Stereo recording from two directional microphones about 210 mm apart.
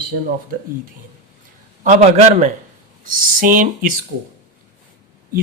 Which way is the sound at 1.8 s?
35° right (ahead or behind).